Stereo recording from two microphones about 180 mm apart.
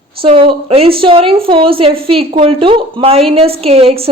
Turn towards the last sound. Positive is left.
turn(degrees=-35)  # may be behind; listen again after turning